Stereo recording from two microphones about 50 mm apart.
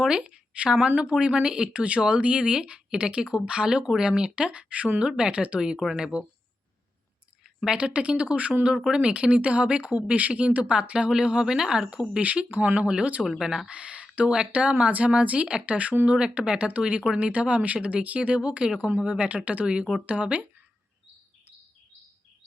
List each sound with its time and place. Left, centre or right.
0.0 s speech: centre
5.5 s speech: centre
7.8 s speech: right
8.7 s speech: centre
9.0 s speech: right
12.2 s speech: right
18.8 s speech: right
19.0 s speech: right